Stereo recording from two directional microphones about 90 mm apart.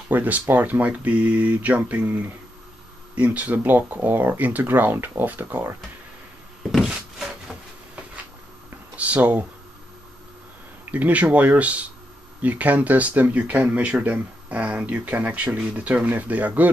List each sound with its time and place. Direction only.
0.1 s speech: 20° right (ahead or behind)
6.7 s a sound: 5° right (ahead or behind)
10.9 s speech: 15° right (ahead or behind)